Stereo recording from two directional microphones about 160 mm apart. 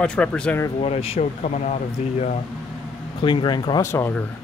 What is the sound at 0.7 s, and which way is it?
Speech, 40° left (ahead or behind).